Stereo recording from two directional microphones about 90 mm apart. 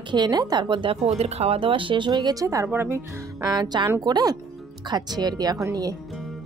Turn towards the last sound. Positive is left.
turn(degrees=-40)  # may be behind; listen again after turning